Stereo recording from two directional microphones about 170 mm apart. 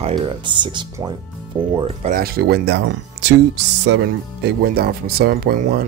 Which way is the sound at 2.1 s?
65° right (ahead or behind).